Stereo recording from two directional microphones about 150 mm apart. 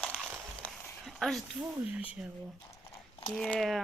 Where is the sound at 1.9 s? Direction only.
10° right (ahead or behind).